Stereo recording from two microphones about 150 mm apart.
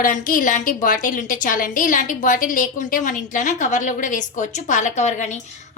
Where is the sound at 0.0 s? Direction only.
65° left (ahead or behind).